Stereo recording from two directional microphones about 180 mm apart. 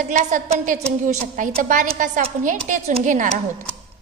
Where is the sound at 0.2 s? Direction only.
45° right (ahead or behind).